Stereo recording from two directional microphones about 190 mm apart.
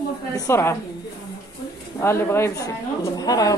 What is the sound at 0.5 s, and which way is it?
Speech, 15° left (ahead or behind).